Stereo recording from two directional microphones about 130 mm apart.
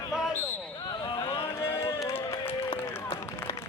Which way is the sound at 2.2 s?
25° left (ahead or behind).